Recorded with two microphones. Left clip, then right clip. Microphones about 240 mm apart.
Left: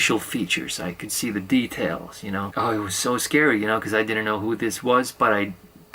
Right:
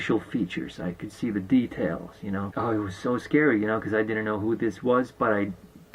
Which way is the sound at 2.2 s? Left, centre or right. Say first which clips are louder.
Left 4 dB; right.